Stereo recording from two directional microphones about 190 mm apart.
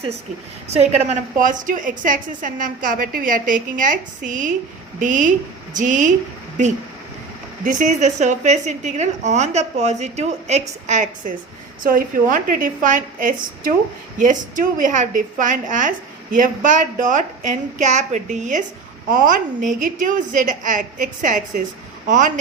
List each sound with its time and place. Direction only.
0.7 s a woman's voice: 35° right (ahead or behind)
7.6 s a woman's voice: 40° right (ahead or behind)